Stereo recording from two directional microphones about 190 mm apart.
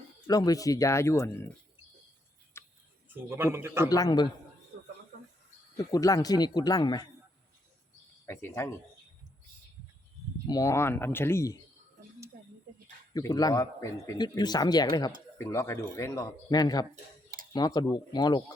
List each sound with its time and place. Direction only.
0.3 s speech: 20° left (ahead or behind)
2.5 s a sound: 15° left (ahead or behind)
3.1 s speech: 10° right (ahead or behind)
3.8 s speech: 20° left (ahead or behind)
5.7 s speech: 20° left (ahead or behind)
8.3 s speech: 10° left (ahead or behind)
10.4 s speech: 20° left (ahead or behind)
13.1 s speech: 20° left (ahead or behind)